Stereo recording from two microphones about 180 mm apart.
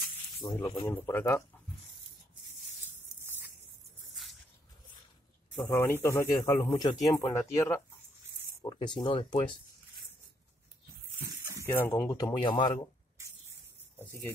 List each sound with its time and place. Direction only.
0.4 s speech: 20° left (ahead or behind)
5.6 s speech: 10° left (ahead or behind); by 9.6 s 25° left (ahead or behind)
11.6 s speech: 15° left (ahead or behind)